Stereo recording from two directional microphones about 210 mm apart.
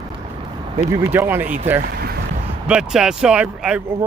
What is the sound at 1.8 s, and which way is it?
Speech, 45° right (ahead or behind).